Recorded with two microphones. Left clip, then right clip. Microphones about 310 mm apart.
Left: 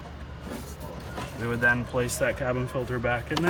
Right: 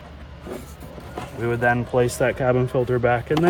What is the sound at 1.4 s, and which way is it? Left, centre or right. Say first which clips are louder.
Speech: right 4 dB; right.